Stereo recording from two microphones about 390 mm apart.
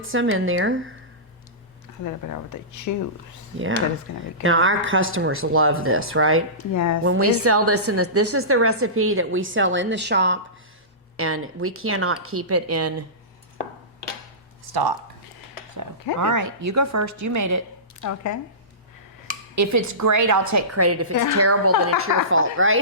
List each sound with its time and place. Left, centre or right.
0.0 s a woman's voice: right
2.0 s speech: left
4.1 s speech: left
4.4 s a woman's voice: right
6.7 s speech: left
7.0 s a woman's voice: right
14.7 s speech: right
16.1 s a woman's voice: right
18.0 s speech: left
19.5 s a woman's voice: right
21.1 s speech: left
21.3 s a woman's voice: right